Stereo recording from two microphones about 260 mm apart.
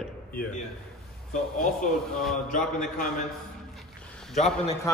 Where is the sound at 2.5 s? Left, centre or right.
Left.